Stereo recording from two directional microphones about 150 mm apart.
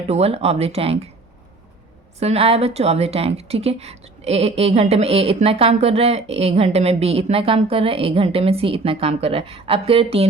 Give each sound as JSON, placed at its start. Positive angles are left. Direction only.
{"t": 0.1, "sound": "a woman's voice", "side_deg": -45}
{"t": 2.1, "sound": "a woman's voice", "side_deg": -45}